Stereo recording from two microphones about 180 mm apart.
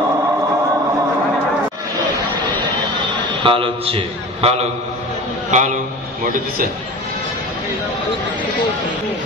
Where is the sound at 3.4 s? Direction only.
30° right (ahead or behind).